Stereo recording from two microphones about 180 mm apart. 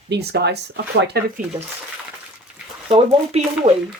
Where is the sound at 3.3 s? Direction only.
35° right (ahead or behind).